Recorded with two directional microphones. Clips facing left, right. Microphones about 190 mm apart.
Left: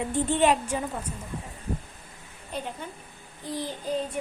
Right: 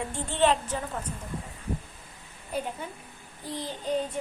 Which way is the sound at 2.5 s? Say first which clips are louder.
Right 2 dB; 5° right (ahead or behind).